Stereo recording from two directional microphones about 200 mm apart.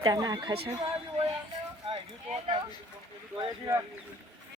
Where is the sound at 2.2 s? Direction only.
30° right (ahead or behind).